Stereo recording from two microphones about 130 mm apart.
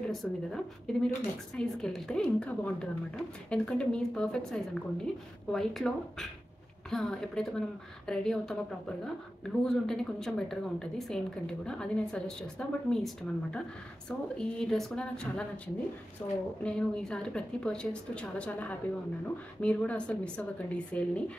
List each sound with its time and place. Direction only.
0.1 s a woman's voice: centre (ahead or behind)
16.2 s a woman's voice: 25° left (ahead or behind)
16.6 s a woman's voice: 5° left (ahead or behind)